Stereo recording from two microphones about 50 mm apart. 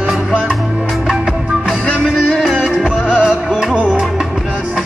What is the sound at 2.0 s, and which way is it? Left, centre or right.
Music, centre.